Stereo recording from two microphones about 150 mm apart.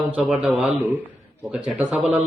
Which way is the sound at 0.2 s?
5° right (ahead or behind).